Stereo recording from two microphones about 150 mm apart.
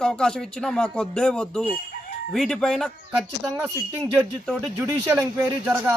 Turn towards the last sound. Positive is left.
turn(degrees=-10)  # may be behind; listen again after turning